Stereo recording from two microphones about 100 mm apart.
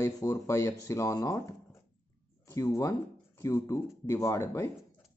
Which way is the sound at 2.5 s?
30° left (ahead or behind).